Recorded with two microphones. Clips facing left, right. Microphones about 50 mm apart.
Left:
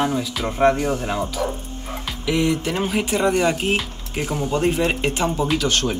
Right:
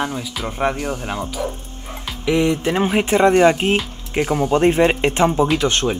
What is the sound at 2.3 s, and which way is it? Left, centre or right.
Speech, right.